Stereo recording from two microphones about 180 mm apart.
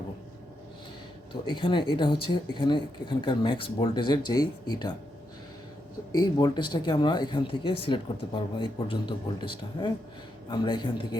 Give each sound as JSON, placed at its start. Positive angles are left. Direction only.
{"t": 1.3, "sound": "speech", "side_deg": 25}
{"t": 6.1, "sound": "speech", "side_deg": 20}